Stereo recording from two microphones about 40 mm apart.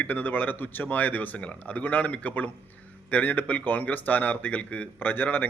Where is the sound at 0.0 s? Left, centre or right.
Left.